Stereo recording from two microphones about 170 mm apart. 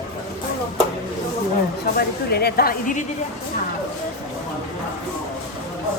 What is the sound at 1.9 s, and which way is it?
Speech, 70° left (ahead or behind).